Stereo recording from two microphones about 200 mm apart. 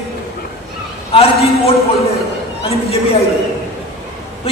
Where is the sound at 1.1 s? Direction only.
30° left (ahead or behind).